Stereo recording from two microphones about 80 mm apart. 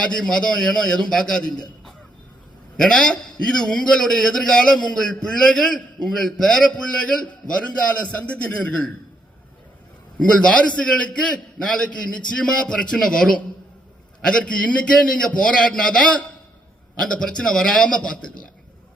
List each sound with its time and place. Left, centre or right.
0.1 s a man's voice: centre
2.7 s a man's voice: centre
10.2 s a man's voice: centre